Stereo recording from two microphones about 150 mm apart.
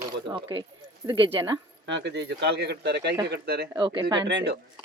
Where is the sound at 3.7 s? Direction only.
35° right (ahead or behind).